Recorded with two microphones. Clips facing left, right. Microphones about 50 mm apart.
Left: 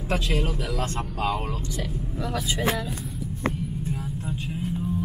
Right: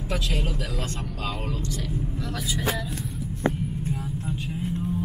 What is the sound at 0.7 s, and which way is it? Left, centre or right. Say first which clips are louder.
Speech: left 4 dB; left.